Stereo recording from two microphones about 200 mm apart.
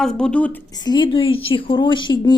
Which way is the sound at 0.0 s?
5° left (ahead or behind).